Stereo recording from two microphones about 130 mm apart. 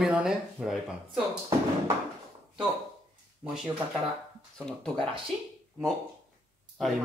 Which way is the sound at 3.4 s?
5° right (ahead or behind).